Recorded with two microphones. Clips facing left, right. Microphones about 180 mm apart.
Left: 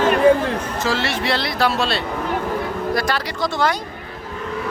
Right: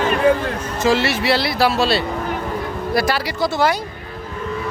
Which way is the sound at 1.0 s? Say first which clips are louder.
Right 3 dB; 5° right (ahead or behind).